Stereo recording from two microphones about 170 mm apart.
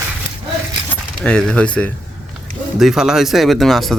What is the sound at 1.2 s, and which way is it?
Speech, 5° left (ahead or behind).